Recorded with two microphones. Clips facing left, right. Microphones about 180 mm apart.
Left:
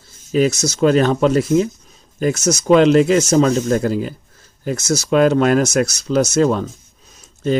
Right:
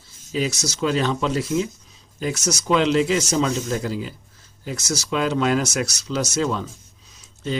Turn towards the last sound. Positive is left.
turn(degrees=50)  # may be behind; listen again after turning